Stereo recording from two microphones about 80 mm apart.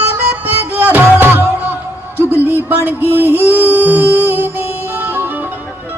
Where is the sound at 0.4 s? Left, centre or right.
Right.